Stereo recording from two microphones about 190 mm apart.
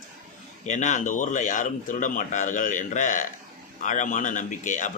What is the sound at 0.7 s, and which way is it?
Speech, 40° left (ahead or behind).